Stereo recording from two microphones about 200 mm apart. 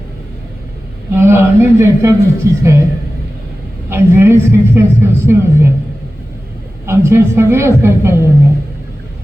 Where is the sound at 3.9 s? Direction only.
10° right (ahead or behind).